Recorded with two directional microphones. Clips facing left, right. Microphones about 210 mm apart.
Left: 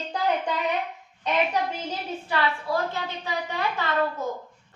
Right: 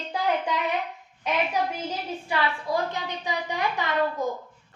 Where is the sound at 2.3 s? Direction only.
15° right (ahead or behind).